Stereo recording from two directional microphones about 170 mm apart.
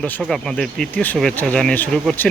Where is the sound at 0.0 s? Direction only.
5° left (ahead or behind).